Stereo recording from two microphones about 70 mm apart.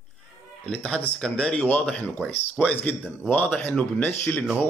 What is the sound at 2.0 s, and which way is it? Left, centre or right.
Speech, left.